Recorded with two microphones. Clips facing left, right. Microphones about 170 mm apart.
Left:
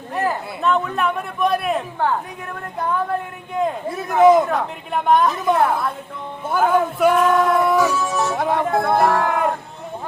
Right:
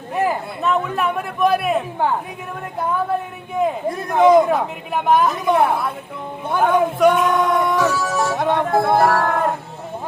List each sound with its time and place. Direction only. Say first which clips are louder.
0.1 s a man's voice: right 2 dB; 5° right (ahead or behind)
3.6 s a man's voice: right 2 dB; centre (ahead or behind)